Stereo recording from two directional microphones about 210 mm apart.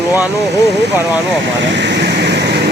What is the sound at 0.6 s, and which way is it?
Speech, 55° right (ahead or behind).